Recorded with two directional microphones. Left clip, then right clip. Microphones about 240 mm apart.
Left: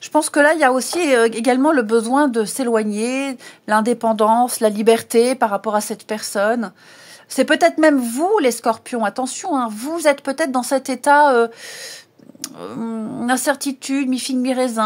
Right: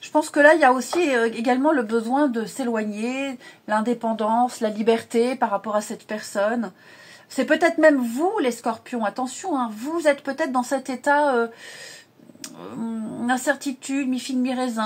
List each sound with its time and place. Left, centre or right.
0.0 s speech: left